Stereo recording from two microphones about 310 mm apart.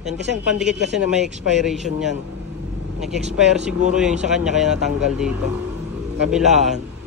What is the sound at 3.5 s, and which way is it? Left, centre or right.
Speech, centre.